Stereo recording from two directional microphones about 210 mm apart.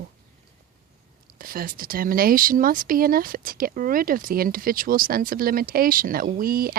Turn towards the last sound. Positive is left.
turn(degrees=-45)  # may be behind; listen again after turning